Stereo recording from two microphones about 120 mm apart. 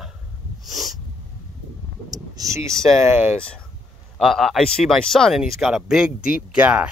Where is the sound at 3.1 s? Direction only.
20° right (ahead or behind).